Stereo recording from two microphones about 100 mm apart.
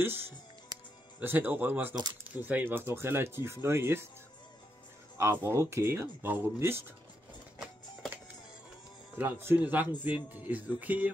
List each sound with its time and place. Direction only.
1.2 s speech: 20° right (ahead or behind)
5.1 s speech: 30° right (ahead or behind)
7.5 s a sound: centre (ahead or behind)
9.1 s speech: 20° right (ahead or behind)